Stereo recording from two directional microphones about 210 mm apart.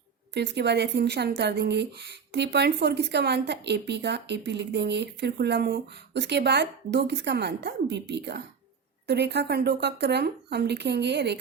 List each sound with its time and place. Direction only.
0.3 s speech: 55° right (ahead or behind)